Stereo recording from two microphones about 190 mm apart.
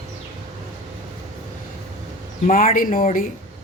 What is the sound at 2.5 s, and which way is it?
Speech, 45° left (ahead or behind).